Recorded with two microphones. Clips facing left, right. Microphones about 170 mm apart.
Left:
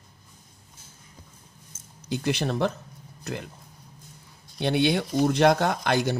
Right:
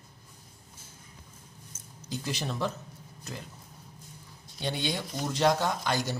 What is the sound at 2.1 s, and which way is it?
Speech, 65° left (ahead or behind).